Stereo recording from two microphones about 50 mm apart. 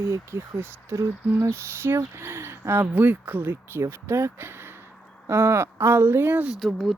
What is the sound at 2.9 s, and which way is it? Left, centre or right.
Speech, right.